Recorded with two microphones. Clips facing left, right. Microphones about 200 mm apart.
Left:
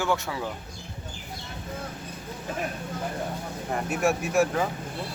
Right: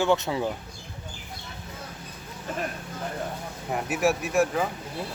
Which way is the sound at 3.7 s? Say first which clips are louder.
Right 1 dB; 5° right (ahead or behind).